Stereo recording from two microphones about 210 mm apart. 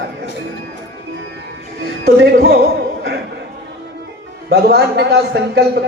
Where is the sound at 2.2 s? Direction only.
50° right (ahead or behind).